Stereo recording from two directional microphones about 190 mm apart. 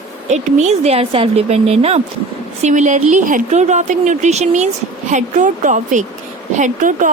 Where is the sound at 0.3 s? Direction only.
35° right (ahead or behind).